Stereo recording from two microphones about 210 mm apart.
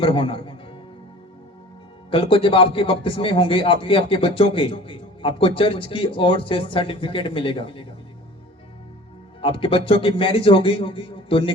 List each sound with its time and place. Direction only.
0.0 s a man's voice: 25° left (ahead or behind)
2.0 s a man's voice: 25° left (ahead or behind)
9.4 s a man's voice: 25° left (ahead or behind)